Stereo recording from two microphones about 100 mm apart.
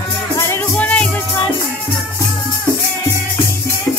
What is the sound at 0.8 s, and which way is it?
Music, 15° left (ahead or behind).